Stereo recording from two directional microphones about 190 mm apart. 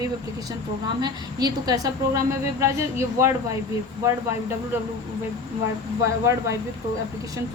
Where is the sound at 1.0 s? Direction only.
20° right (ahead or behind).